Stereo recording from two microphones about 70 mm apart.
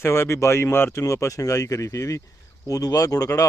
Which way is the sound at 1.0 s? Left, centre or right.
Left.